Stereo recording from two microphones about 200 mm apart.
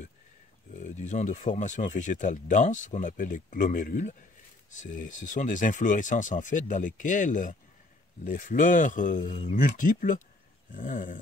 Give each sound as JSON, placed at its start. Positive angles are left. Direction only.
{"t": 0.7, "sound": "speech", "side_deg": 40}